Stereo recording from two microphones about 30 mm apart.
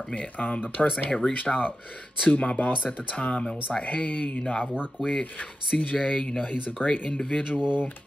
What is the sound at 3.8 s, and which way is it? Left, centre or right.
Speech, left.